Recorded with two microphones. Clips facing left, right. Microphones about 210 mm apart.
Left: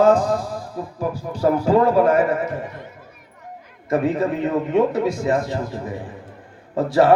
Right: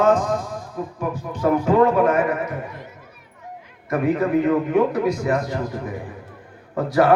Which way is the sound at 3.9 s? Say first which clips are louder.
Even; 25° left (ahead or behind).